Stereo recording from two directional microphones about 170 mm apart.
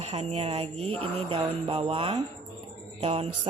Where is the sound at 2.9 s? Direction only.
40° right (ahead or behind).